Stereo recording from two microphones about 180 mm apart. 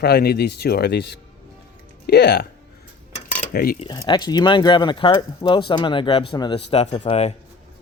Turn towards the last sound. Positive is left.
turn(degrees=35)  # may be behind; listen again after turning